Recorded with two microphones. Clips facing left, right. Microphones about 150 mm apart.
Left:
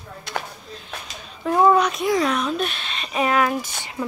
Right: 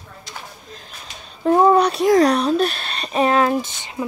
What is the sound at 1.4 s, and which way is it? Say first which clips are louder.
Speech: right 3 dB; 30° right (ahead or behind).